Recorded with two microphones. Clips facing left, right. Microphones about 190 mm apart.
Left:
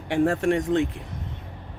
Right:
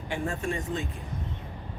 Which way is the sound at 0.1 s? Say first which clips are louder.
Left 10 dB; 75° left (ahead or behind).